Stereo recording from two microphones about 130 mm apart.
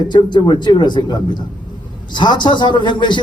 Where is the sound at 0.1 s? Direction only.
35° left (ahead or behind).